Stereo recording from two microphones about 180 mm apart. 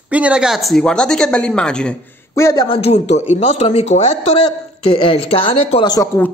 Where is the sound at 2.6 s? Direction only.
30° left (ahead or behind).